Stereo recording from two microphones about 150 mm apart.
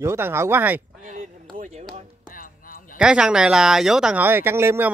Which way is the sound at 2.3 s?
70° left (ahead or behind).